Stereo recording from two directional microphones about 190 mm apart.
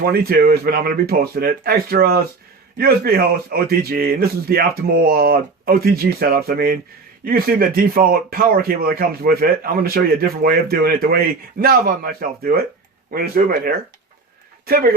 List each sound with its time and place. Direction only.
0.0 s speech: 55° right (ahead or behind)
13.1 s speech: 50° right (ahead or behind)